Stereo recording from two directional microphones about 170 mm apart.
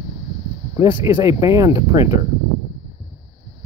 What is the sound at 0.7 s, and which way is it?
Speech, 15° right (ahead or behind).